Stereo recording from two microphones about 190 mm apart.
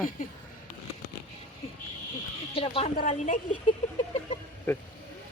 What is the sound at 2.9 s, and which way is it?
Speech, 40° left (ahead or behind).